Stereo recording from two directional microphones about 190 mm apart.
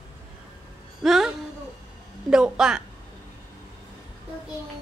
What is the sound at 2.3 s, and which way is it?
Speech, 5° right (ahead or behind).